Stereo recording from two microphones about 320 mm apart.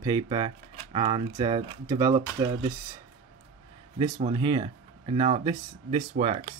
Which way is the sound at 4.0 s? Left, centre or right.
Centre.